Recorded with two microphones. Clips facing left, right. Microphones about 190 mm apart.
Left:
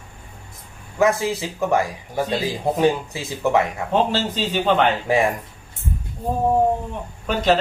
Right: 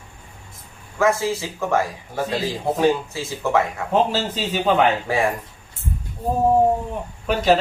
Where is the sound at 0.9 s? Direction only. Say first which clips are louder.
Left 1 dB; 20° left (ahead or behind).